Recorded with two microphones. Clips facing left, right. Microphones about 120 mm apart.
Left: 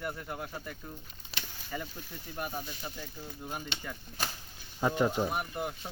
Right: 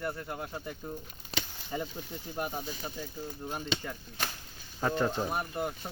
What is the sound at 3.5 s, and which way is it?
Speech, 5° right (ahead or behind).